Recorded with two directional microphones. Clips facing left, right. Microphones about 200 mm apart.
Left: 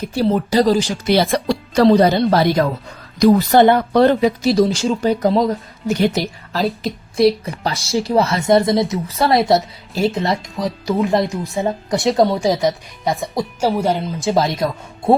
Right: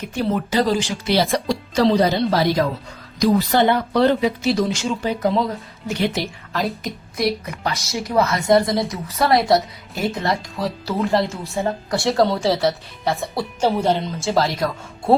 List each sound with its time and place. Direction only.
0.0 s speech: 35° left (ahead or behind)
1.1 s a woman's voice: 55° left (ahead or behind); by 14.3 s 10° left (ahead or behind)
14.3 s a woman's voice: 20° left (ahead or behind)